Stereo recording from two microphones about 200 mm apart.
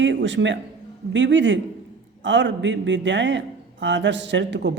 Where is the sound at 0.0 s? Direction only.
65° right (ahead or behind).